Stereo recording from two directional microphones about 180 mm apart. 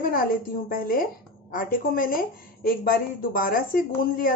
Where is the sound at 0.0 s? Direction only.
50° left (ahead or behind).